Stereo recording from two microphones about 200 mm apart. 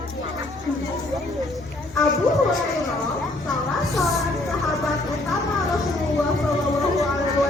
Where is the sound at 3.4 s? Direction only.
Centre (ahead or behind).